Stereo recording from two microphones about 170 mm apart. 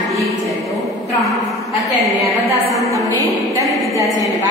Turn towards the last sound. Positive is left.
turn(degrees=-20)  # may be behind; listen again after turning